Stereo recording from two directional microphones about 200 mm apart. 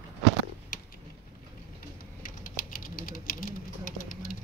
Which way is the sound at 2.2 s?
45° left (ahead or behind).